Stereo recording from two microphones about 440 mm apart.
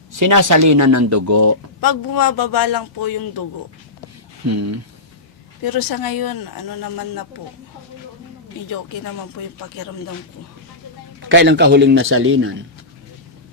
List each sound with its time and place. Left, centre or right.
0.2 s speech: right
1.8 s speech: left
4.4 s speech: right
5.6 s speech: left
11.3 s a man's voice: right